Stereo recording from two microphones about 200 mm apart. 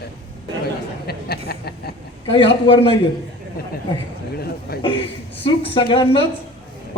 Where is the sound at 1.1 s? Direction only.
50° left (ahead or behind).